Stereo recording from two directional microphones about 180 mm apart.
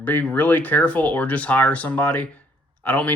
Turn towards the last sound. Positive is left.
turn(degrees=10)  # may be behind; listen again after turning